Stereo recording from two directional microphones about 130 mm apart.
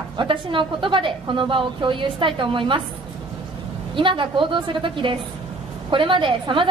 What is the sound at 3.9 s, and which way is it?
A woman's voice, 40° right (ahead or behind).